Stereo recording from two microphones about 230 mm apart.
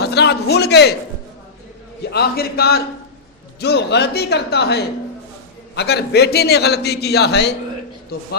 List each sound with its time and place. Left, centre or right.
0.0 s a man's voice: left
2.0 s a man's voice: left